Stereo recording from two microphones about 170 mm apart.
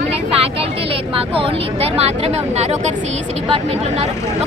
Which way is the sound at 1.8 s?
35° right (ahead or behind).